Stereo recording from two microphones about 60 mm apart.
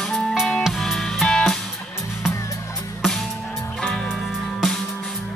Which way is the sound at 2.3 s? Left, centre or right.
Left.